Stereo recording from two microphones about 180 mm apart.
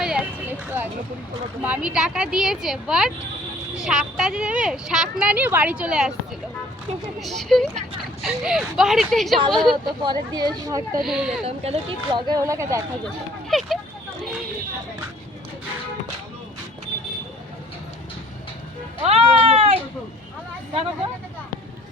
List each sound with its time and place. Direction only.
0.0 s a sound: 10° right (ahead or behind)
1.6 s a woman's voice: 5° right (ahead or behind)
7.2 s a woman's voice: centre (ahead or behind)
10.0 s speech: 25° right (ahead or behind)
11.0 s a woman's voice: 5° right (ahead or behind)
11.4 s speech: 35° right (ahead or behind); by 12.8 s 15° right (ahead or behind)
13.5 s speech: centre (ahead or behind)
19.0 s speech: 35° right (ahead or behind)